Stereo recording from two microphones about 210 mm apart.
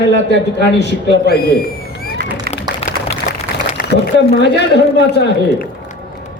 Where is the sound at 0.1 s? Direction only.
55° left (ahead or behind).